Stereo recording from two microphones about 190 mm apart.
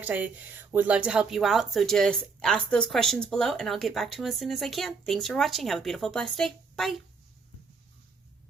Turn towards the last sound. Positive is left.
turn(degrees=0)  # may be behind; listen again after turning